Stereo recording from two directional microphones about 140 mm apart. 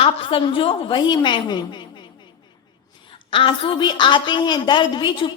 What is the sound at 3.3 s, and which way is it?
A woman's voice, 40° left (ahead or behind).